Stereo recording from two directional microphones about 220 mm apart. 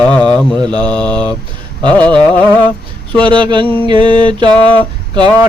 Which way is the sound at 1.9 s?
5° left (ahead or behind).